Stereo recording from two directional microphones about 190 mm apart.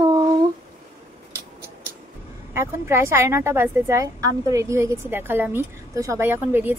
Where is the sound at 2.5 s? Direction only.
15° right (ahead or behind).